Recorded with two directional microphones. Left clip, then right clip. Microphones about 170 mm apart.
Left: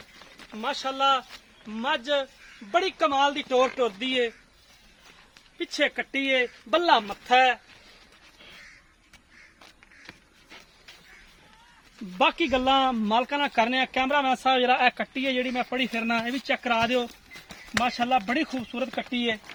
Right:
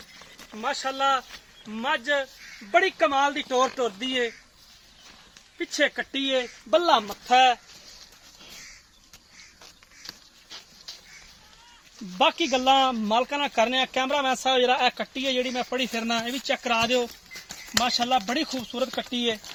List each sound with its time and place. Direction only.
0.5 s speech: 45° right (ahead or behind)
5.5 s speech: 40° right (ahead or behind)
6.7 s speech: 65° right (ahead or behind)
12.1 s speech: 60° right (ahead or behind); by 17.1 s 20° right (ahead or behind)
17.7 s speech: 5° right (ahead or behind)